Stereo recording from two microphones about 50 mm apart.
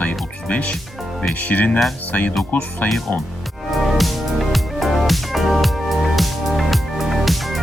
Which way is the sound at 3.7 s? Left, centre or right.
Centre.